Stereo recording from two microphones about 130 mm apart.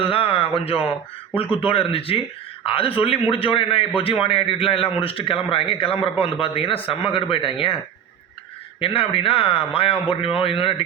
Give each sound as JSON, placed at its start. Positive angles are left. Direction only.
{"t": 0.0, "sound": "a man's voice", "side_deg": 45}
{"t": 8.8, "sound": "a man's voice", "side_deg": 45}